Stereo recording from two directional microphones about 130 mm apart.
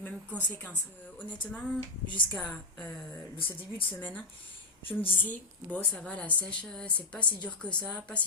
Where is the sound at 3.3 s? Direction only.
40° left (ahead or behind).